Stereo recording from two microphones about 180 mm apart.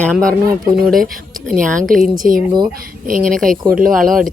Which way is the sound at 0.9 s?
50° right (ahead or behind).